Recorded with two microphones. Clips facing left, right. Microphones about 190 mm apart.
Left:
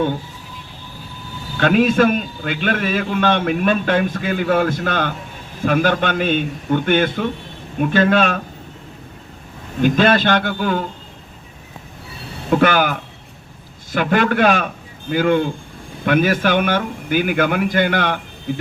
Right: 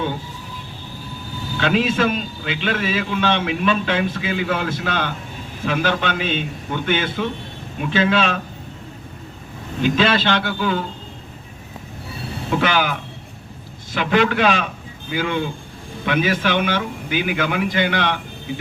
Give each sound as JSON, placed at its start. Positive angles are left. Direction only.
{"t": 1.5, "sound": "a man's voice", "side_deg": 50}
{"t": 9.8, "sound": "a man's voice", "side_deg": 50}
{"t": 12.5, "sound": "a man's voice", "side_deg": 50}